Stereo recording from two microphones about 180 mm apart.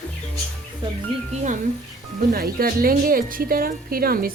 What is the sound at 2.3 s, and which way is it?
A woman's voice, 55° right (ahead or behind).